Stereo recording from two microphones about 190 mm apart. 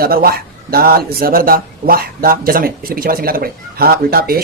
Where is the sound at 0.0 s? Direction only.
50° right (ahead or behind).